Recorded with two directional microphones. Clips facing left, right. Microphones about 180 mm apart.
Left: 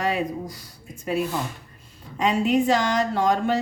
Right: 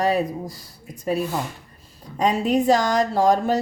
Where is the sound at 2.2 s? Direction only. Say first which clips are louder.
Right 1 dB; 40° right (ahead or behind).